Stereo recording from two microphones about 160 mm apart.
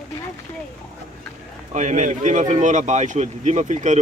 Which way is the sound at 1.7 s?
50° right (ahead or behind).